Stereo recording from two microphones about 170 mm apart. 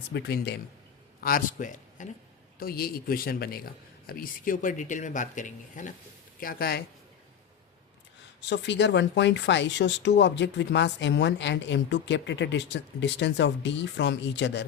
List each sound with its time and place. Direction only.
0.1 s speech: 80° left
1.2 s a man's voice: 55° left (ahead or behind)
2.6 s a man's voice: 65° left (ahead or behind); by 5.9 s 50° left (ahead or behind)
6.4 s a man's voice: 60° left (ahead or behind)
8.4 s speech: 90° left